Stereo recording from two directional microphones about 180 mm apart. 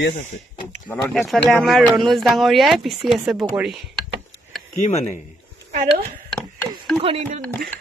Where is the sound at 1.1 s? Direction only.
Centre (ahead or behind).